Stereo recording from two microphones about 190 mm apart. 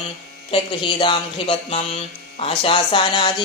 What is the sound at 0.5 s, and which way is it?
Speech, 25° left (ahead or behind).